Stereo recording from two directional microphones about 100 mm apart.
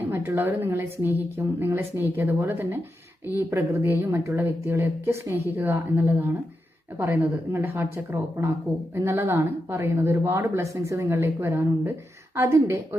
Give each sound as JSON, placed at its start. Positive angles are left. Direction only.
{"t": 0.0, "sound": "a woman's voice", "side_deg": -20}